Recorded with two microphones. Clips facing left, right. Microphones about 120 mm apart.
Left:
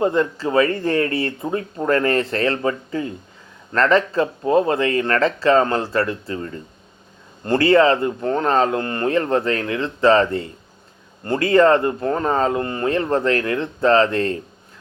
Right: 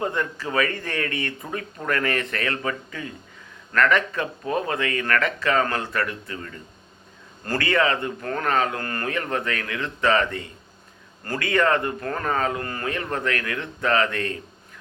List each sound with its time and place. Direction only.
0.0 s speech: 30° left (ahead or behind)